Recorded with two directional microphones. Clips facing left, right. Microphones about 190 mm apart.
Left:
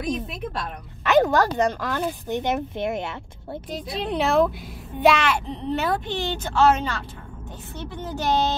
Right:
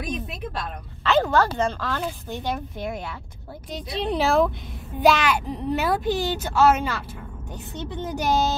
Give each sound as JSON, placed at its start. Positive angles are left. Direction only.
{"t": 1.0, "sound": "speech", "side_deg": 15}
{"t": 3.7, "sound": "speech", "side_deg": 0}
{"t": 7.7, "sound": "speech", "side_deg": -20}